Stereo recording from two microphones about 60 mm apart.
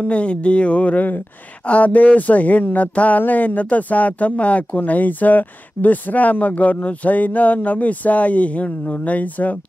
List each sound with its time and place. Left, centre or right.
0.0 s speech: centre